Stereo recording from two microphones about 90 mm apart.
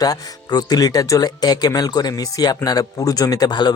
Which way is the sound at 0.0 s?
45° left (ahead or behind).